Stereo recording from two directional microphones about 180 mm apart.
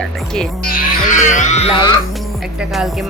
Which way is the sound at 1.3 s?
40° left (ahead or behind).